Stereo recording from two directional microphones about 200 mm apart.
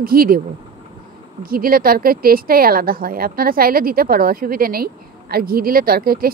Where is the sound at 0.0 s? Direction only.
45° right (ahead or behind).